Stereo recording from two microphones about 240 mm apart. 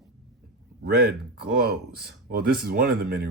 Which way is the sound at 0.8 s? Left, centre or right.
Right.